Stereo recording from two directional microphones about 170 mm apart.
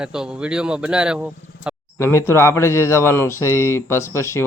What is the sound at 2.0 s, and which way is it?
Speech, 15° left (ahead or behind).